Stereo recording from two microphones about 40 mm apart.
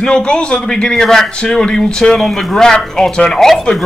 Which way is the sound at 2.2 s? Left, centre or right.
Centre.